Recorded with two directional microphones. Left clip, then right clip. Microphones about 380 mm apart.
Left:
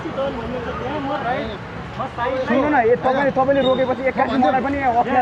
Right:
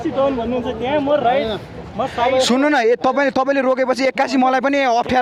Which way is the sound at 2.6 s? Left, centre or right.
Right.